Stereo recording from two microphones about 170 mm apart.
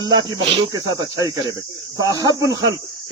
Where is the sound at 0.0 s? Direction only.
25° right (ahead or behind).